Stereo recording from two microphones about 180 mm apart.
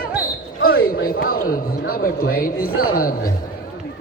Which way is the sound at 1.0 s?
55° left (ahead or behind).